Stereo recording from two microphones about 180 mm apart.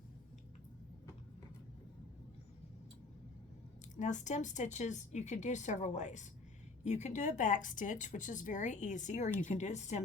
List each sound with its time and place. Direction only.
3.9 s speech: 40° left (ahead or behind)